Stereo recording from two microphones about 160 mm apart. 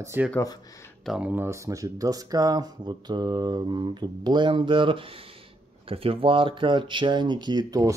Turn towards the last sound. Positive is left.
turn(degrees=-20)  # may be behind; listen again after turning